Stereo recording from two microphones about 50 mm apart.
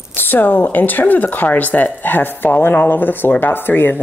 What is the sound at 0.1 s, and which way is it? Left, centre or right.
Speech, left.